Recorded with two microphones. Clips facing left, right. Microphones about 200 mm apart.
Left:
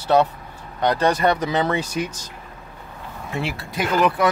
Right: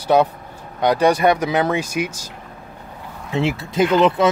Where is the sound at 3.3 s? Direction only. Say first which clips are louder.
Right 7 dB; 20° right (ahead or behind).